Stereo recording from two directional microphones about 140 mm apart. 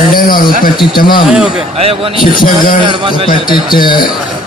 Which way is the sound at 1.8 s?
45° right (ahead or behind).